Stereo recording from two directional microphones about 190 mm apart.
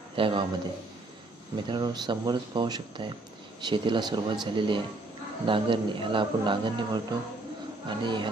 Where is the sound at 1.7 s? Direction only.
20° right (ahead or behind).